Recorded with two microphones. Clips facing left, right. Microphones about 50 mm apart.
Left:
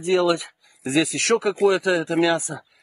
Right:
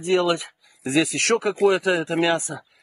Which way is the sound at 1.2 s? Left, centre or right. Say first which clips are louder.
Left 1 dB; right.